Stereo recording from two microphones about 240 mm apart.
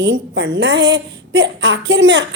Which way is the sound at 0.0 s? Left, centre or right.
Right.